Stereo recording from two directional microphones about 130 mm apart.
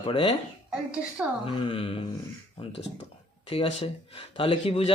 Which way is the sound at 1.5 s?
40° left (ahead or behind).